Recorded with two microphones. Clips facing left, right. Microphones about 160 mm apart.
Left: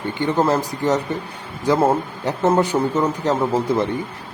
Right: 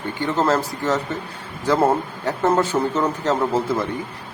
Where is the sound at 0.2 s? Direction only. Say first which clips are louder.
Left 1 dB; 15° left (ahead or behind).